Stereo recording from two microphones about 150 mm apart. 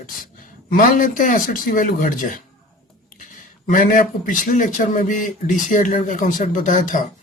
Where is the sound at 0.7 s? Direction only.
60° left (ahead or behind).